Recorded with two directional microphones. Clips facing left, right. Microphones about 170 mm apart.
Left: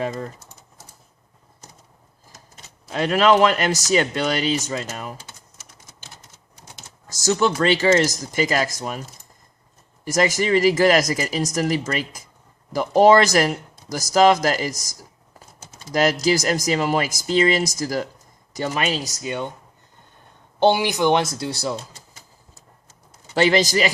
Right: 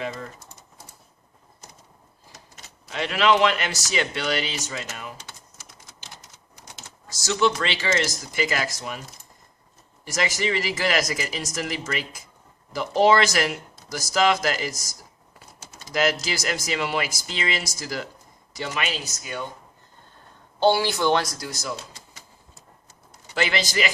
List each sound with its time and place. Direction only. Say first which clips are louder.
0.0 s speech: left 5 dB; 40° left (ahead or behind)
2.9 s speech: left 4 dB; 40° left (ahead or behind)
7.1 s speech: left 3 dB; 45° left (ahead or behind)
10.0 s speech: left 6 dB; 45° left (ahead or behind)
15.9 s speech: left 5 dB; 40° left (ahead or behind)
20.6 s speech: left 3 dB; 20° left (ahead or behind)
23.3 s speech: left 8 dB; 35° left (ahead or behind)